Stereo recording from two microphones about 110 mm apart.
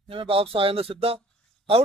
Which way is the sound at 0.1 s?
55° right (ahead or behind).